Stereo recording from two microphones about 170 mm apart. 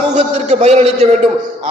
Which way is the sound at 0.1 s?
45° right (ahead or behind).